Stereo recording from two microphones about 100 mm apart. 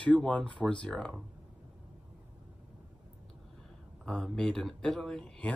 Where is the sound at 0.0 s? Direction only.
10° left (ahead or behind).